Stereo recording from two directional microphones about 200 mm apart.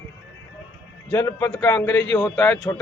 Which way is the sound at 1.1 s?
10° left (ahead or behind).